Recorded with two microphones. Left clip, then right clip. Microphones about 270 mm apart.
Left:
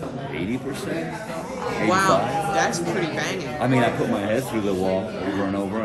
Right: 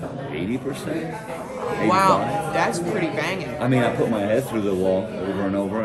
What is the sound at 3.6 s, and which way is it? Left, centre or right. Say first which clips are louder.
Speech: even; centre.